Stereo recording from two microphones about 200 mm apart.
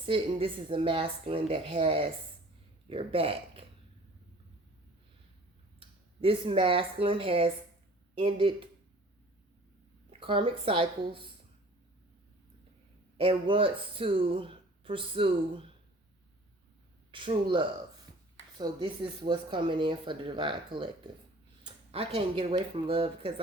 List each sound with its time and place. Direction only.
0.0 s speech: 25° right (ahead or behind)
5.8 s speech: 25° right (ahead or behind)
10.1 s speech: 25° right (ahead or behind)
13.1 s speech: 25° right (ahead or behind)
17.1 s speech: 25° right (ahead or behind)